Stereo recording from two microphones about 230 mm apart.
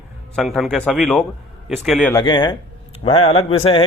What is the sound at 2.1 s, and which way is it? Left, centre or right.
Speech, left.